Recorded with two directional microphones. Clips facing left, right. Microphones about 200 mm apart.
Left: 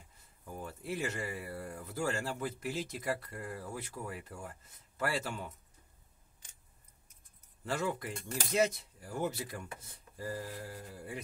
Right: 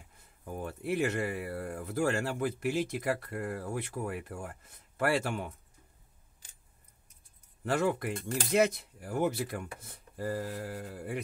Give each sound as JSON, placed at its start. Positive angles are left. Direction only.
{"t": 0.5, "sound": "speech", "side_deg": -60}
{"t": 7.6, "sound": "speech", "side_deg": -60}